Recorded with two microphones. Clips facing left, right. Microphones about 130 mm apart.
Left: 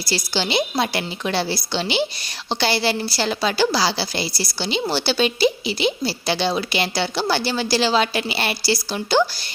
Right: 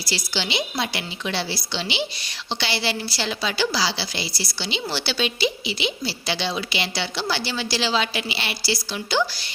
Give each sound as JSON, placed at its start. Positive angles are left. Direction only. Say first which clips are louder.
{"t": 0.1, "sound": "a woman's voice", "louder": "left 5 dB", "side_deg": 45}